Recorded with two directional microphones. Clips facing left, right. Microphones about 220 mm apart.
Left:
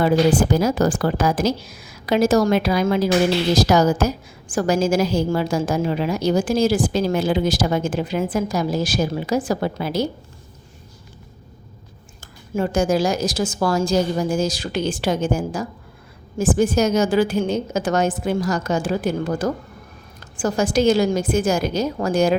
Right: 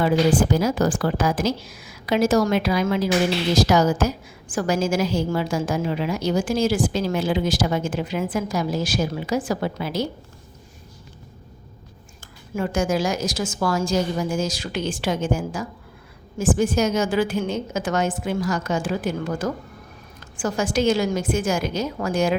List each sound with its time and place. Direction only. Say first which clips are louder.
0.0 s a woman's voice: left 2 dB; 40° left (ahead or behind)
12.5 s a woman's voice: left 3 dB; 35° left (ahead or behind)